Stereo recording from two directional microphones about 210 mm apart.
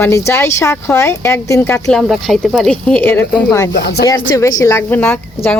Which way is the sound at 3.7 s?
50° left (ahead or behind).